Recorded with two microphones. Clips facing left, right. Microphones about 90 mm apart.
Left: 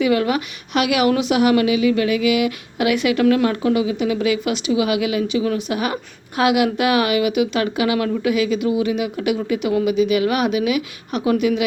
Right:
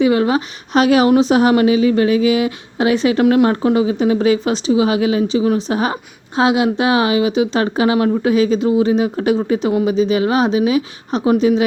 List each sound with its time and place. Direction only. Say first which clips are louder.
0.0 s a woman's voice: right 4 dB; 30° right (ahead or behind)